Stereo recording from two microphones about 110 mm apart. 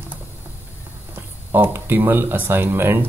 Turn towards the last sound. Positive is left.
turn(degrees=-20)  # may be behind; listen again after turning